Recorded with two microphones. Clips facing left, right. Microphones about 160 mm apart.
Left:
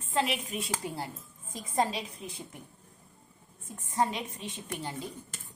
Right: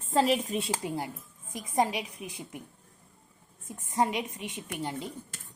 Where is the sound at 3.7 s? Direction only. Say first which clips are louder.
Right 1 dB; 20° right (ahead or behind).